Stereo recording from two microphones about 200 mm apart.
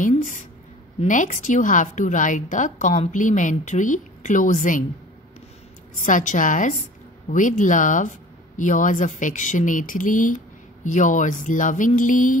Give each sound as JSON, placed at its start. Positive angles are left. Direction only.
{"t": 0.0, "sound": "a woman's voice", "side_deg": 40}
{"t": 6.0, "sound": "a woman's voice", "side_deg": 40}